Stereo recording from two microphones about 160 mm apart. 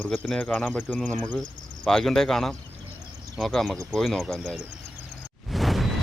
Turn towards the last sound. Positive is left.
turn(degrees=0)  # may be behind; listen again after turning